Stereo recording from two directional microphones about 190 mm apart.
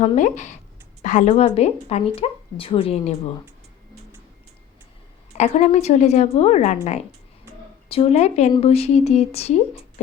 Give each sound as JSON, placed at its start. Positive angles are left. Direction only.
{"t": 0.0, "sound": "speech", "side_deg": 40}
{"t": 5.4, "sound": "speech", "side_deg": 35}
{"t": 7.9, "sound": "speech", "side_deg": 30}